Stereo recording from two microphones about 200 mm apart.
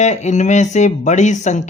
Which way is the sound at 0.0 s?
35° left (ahead or behind).